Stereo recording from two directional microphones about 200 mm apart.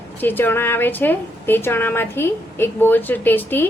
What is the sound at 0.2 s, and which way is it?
A woman's voice, 10° left (ahead or behind).